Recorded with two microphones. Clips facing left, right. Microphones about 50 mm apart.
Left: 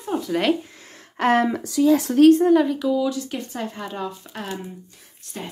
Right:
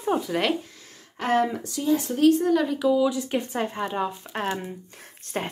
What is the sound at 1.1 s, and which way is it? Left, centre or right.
Speech, left.